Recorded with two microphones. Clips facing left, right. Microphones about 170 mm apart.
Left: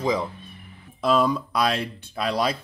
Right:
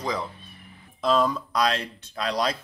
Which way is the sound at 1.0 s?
10° left (ahead or behind).